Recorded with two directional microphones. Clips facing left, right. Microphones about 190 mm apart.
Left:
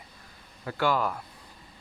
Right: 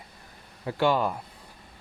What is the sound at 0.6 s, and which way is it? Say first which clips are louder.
Speech: right 3 dB; 20° right (ahead or behind).